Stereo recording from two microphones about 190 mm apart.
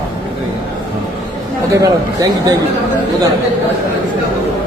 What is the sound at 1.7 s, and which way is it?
Speech, 20° right (ahead or behind).